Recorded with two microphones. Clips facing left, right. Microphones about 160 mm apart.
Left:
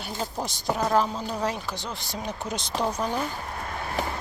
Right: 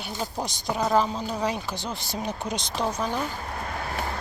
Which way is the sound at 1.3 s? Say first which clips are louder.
Right 1 dB; 10° right (ahead or behind).